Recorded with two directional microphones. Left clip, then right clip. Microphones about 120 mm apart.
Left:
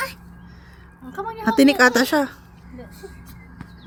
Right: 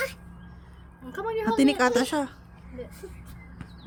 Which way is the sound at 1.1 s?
30° right (ahead or behind).